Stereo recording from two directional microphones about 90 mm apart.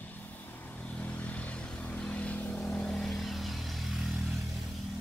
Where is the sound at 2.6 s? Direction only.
5° left (ahead or behind).